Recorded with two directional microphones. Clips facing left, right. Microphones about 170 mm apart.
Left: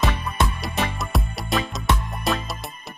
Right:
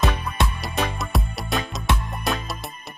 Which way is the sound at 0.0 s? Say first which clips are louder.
Even; centre (ahead or behind).